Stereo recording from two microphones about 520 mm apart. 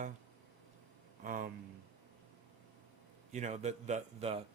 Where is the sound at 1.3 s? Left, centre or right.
Centre.